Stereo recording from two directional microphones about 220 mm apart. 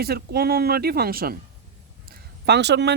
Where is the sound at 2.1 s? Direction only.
50° right (ahead or behind).